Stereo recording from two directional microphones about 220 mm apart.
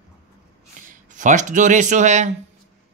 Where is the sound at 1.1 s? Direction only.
35° right (ahead or behind).